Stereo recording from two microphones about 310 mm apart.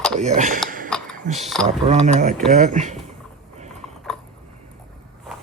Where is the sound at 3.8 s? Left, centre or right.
Centre.